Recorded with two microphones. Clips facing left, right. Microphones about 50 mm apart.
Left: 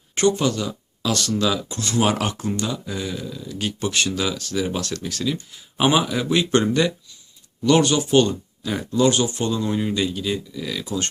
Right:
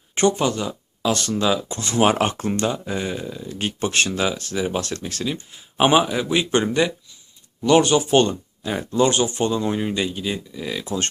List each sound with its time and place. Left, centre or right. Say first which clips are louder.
0.2 s speech: even; right
4.8 s speech: even; right
5.2 s speech: left 1 dB; right